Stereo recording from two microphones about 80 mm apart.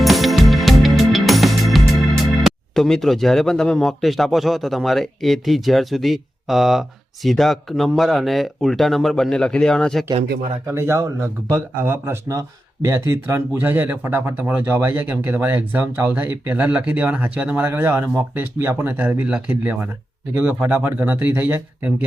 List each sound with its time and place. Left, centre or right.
0.0 s music: centre
2.0 s speech: centre
10.7 s speech: right